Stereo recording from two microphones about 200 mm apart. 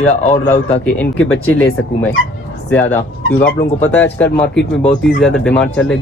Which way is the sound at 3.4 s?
10° left (ahead or behind).